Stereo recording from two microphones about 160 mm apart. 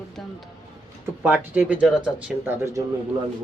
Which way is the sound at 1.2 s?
10° right (ahead or behind).